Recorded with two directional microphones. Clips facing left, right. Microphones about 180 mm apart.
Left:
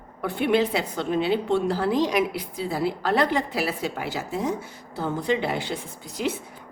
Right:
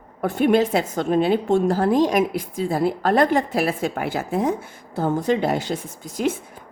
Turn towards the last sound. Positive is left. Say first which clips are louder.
# right 5 dB
turn(degrees=-45)  # may be behind; listen again after turning